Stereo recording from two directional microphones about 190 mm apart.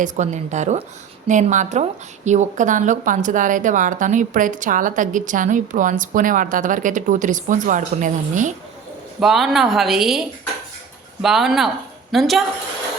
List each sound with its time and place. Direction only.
0.0 s a woman's voice: 40° right (ahead or behind)
9.2 s a woman's voice: centre (ahead or behind)